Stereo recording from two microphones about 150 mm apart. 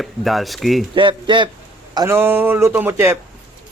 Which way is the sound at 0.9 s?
35° right (ahead or behind).